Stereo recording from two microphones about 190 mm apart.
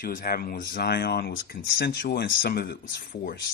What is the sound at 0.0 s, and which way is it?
Speech, 45° left (ahead or behind).